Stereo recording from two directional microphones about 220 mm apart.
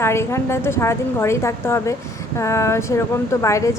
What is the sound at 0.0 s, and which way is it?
A woman's voice, 10° left (ahead or behind).